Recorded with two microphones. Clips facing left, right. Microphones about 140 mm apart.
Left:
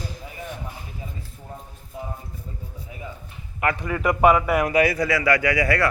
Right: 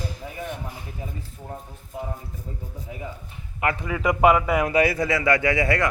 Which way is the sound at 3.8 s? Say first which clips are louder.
Even; 10° right (ahead or behind).